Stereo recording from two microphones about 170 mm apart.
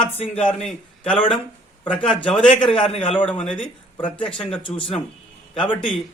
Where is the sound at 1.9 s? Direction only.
5° left (ahead or behind).